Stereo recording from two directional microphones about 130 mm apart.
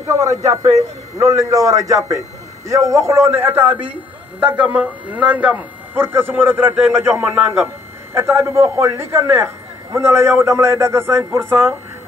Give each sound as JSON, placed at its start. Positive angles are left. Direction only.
{"t": 0.0, "sound": "a man's voice", "side_deg": -25}
{"t": 7.2, "sound": "a man's voice", "side_deg": -5}
{"t": 8.1, "sound": "a man's voice", "side_deg": -20}